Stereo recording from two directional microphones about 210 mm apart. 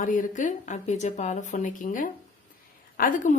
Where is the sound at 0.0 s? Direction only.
40° left (ahead or behind).